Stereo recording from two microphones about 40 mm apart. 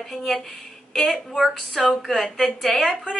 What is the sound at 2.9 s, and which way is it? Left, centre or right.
Speech, left.